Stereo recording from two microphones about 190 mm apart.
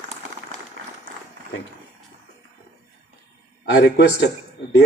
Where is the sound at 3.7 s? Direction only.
60° left (ahead or behind).